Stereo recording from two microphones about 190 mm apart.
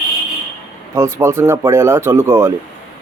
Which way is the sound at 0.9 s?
15° right (ahead or behind).